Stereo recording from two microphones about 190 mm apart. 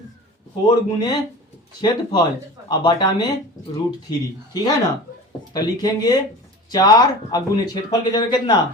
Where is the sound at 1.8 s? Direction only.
20° left (ahead or behind).